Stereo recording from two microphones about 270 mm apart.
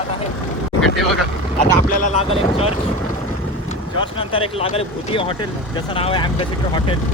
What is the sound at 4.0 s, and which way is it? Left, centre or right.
Speech, centre.